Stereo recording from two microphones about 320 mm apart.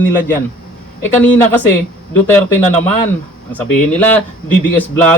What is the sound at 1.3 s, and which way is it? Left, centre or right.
Speech, centre.